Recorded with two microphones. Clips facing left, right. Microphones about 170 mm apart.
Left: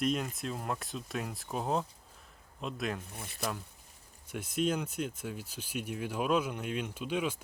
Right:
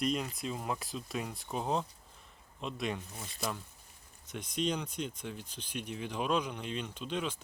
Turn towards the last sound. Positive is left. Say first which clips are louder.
# left 3 dB
turn(degrees=10)  # may be behind; listen again after turning